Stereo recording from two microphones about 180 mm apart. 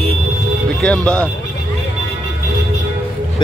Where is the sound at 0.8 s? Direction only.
5° left (ahead or behind).